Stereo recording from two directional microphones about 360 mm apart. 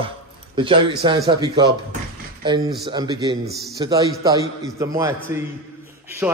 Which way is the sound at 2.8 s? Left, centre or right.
Centre.